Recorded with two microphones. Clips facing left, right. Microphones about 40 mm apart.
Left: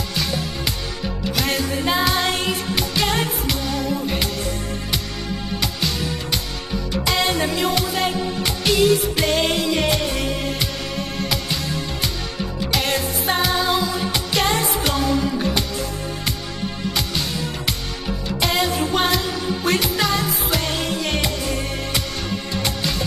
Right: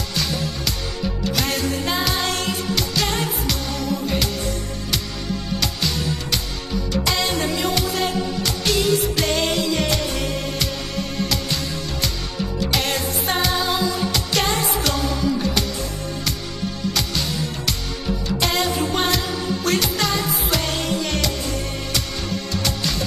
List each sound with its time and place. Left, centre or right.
0.1 s music: centre
5.6 s music: centre
8.0 s music: left
8.6 s music: centre
9.7 s music: centre
12.7 s music: centre
18.4 s music: centre
21.0 s music: left
22.5 s music: left